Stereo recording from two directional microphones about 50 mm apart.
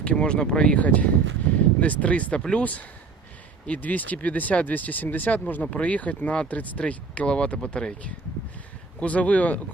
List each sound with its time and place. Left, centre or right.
0.0 s speech: centre
0.8 s speech: left
3.7 s speech: left; by 7.9 s centre
9.0 s speech: left